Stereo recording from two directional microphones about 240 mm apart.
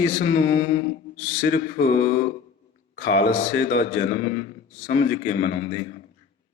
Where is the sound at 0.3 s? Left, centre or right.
Left.